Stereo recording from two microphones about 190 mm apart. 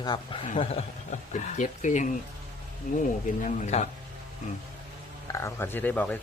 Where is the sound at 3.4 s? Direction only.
40° left (ahead or behind).